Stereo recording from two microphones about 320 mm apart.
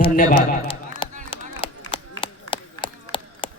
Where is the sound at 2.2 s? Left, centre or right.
Centre.